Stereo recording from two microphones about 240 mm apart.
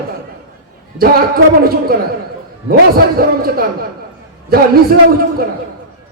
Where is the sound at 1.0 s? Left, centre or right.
Right.